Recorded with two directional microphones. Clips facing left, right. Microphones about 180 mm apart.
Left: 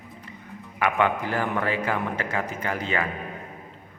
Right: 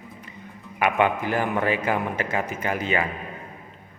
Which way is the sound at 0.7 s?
20° right (ahead or behind).